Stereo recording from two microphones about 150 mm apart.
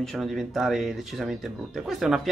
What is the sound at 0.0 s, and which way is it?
Speech, centre (ahead or behind).